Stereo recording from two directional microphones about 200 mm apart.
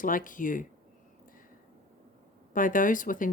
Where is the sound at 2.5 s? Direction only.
40° left (ahead or behind).